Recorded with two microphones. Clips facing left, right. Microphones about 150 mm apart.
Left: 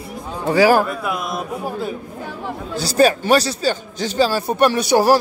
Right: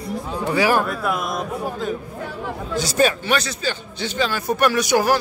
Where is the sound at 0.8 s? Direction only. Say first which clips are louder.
Even; centre (ahead or behind).